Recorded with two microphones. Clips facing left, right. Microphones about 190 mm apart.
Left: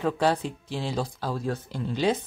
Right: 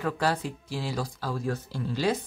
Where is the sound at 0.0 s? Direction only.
20° left (ahead or behind).